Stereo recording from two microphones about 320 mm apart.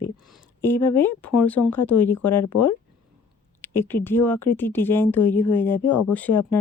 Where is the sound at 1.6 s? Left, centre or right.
Left.